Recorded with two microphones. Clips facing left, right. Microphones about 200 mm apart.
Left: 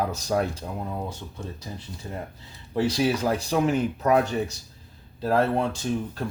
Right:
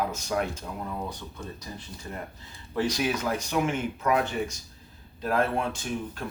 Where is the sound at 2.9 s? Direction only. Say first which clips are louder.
Left 4 dB; 30° left (ahead or behind).